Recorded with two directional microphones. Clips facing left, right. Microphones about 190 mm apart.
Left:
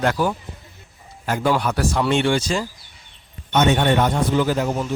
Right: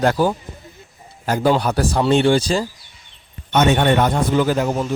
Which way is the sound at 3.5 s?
55° right (ahead or behind).